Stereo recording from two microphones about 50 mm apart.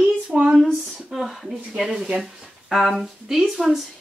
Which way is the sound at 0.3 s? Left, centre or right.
Centre.